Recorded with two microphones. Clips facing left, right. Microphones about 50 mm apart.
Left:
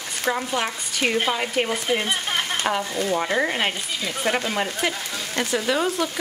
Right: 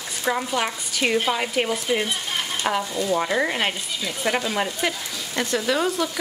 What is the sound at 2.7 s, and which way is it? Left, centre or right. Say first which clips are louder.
Speech: right 3 dB; centre.